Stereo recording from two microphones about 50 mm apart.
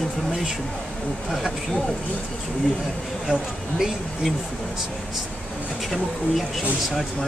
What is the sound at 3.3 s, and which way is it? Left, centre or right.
Speech, centre.